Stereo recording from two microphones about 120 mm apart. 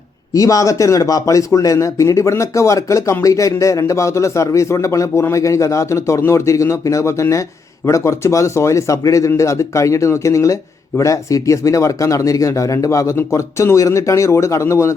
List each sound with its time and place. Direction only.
0.3 s speech: 30° left (ahead or behind)